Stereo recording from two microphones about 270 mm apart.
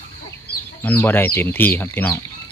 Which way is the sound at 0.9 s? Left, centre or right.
Centre.